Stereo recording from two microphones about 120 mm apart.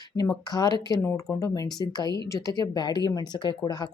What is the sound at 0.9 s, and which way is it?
Speech, 20° left (ahead or behind).